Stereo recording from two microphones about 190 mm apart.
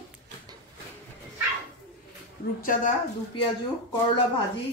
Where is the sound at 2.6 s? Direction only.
45° left (ahead or behind).